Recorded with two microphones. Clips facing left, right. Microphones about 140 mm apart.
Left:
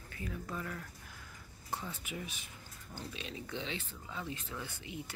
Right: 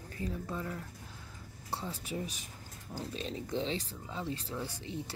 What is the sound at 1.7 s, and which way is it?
Speech, 35° right (ahead or behind).